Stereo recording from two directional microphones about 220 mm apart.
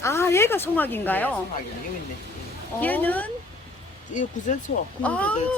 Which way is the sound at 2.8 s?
10° left (ahead or behind).